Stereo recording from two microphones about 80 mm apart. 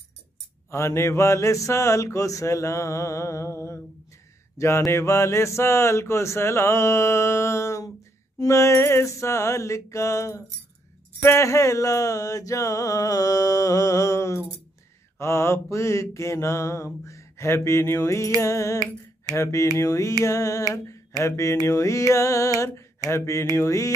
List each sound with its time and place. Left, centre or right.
0.7 s speech: left
11.2 s mantra: left
15.1 s speech: left
20.2 s mantra: left
20.7 s a sound: left
21.2 s speech: left